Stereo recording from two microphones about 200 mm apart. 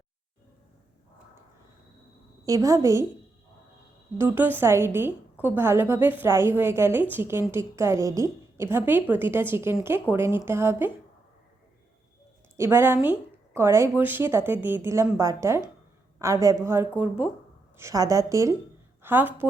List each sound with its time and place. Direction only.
2.5 s a woman's voice: 15° right (ahead or behind)
4.2 s a woman's voice: 10° right (ahead or behind)
12.5 s a woman's voice: 10° right (ahead or behind)